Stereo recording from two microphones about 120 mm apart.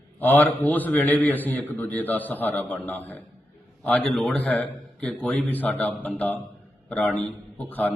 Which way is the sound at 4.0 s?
Centre (ahead or behind).